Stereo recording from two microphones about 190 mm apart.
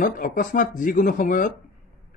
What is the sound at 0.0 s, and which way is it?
Speech, 45° left (ahead or behind).